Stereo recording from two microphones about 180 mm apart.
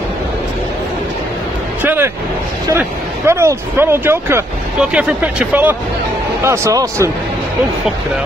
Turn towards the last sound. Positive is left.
turn(degrees=-15)  # may be behind; listen again after turning